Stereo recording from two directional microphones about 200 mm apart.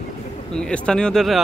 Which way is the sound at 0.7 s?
5° left (ahead or behind).